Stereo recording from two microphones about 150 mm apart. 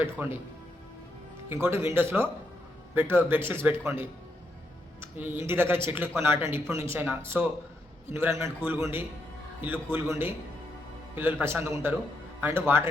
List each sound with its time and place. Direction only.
0.2 s speech: 10° right (ahead or behind)
1.6 s a man's voice: 15° right (ahead or behind)